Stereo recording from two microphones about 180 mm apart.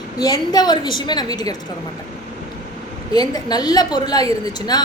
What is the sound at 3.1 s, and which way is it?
Speech, 20° left (ahead or behind).